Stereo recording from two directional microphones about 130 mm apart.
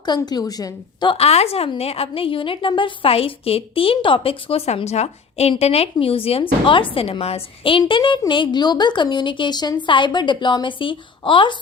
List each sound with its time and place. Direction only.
0.2 s a woman's voice: 30° left (ahead or behind)